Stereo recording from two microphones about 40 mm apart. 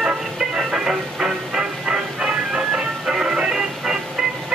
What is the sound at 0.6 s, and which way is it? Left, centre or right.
Music, centre.